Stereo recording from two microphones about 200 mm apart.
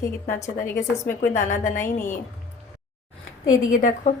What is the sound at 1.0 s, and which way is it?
Speech, 40° left (ahead or behind).